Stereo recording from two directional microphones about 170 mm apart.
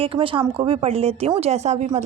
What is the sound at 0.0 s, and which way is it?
Speech, 35° right (ahead or behind).